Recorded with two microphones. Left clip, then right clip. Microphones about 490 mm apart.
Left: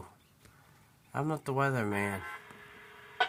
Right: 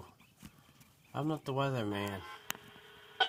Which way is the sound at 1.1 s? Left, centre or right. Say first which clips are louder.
Left 3 dB; right.